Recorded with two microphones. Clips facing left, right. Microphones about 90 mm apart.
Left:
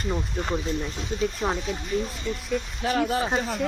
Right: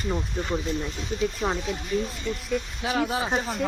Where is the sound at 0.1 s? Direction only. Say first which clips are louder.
Even; centre (ahead or behind).